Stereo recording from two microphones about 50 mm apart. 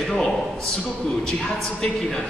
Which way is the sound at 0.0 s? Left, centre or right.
Centre.